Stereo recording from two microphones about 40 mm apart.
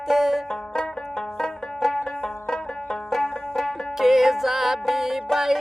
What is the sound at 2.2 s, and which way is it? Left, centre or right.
Banjo, centre.